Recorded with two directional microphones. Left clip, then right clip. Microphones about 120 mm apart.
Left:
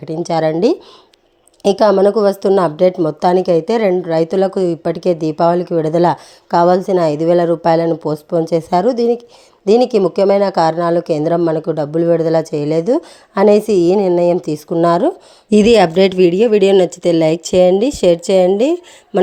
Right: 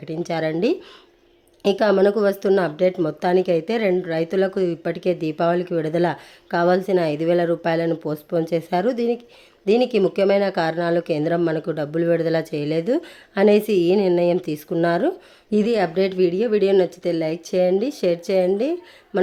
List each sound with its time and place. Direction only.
0.0 s speech: 35° left (ahead or behind)
1.6 s speech: 35° left (ahead or behind)
15.4 s speech: 80° left; by 19.2 s 60° left (ahead or behind)